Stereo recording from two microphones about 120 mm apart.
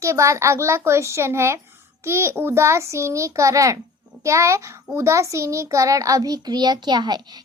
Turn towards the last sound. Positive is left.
turn(degrees=-35)  # may be behind; listen again after turning